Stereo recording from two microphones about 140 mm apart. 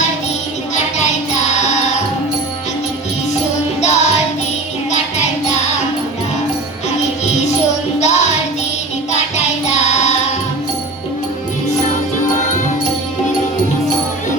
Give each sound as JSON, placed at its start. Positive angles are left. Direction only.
{"t": 0.9, "sound": "music", "side_deg": 55}
{"t": 3.8, "sound": "music", "side_deg": 55}
{"t": 7.9, "sound": "music", "side_deg": 55}
{"t": 9.7, "sound": "music", "side_deg": 55}